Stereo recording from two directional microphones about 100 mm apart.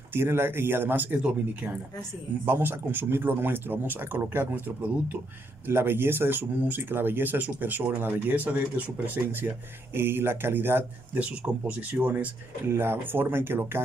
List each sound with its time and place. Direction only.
0.1 s speech: 25° right (ahead or behind)